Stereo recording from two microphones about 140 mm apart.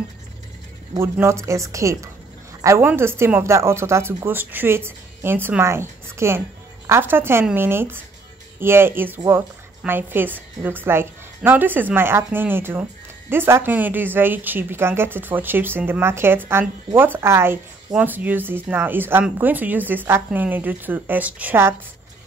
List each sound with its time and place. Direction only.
0.9 s a woman's voice: 20° right (ahead or behind)